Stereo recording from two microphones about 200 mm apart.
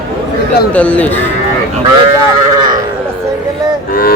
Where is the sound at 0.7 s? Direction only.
5° left (ahead or behind).